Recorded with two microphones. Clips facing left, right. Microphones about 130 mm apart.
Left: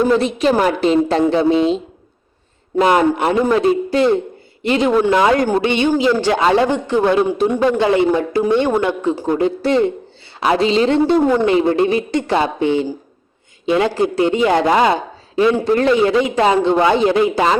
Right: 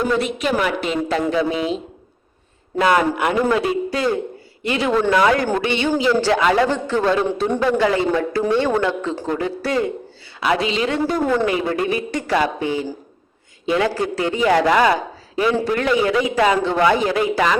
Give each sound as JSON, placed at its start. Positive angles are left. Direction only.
{"t": 0.0, "sound": "speech", "side_deg": 30}
{"t": 2.7, "sound": "a man's voice", "side_deg": 30}
{"t": 5.1, "sound": "a man's voice", "side_deg": 25}